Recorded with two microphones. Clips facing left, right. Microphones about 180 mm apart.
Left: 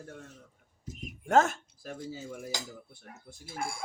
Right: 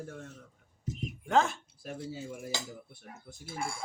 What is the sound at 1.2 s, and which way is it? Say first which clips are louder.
Speech: left 3 dB; 45° left (ahead or behind).